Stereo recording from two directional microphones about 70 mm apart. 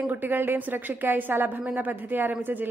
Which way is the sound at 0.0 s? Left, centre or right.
Right.